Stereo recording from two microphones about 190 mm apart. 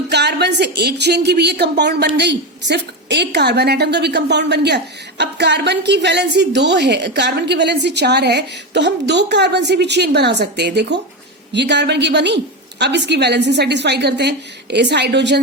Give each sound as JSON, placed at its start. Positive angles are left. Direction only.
{"t": 0.1, "sound": "a woman's voice", "side_deg": -60}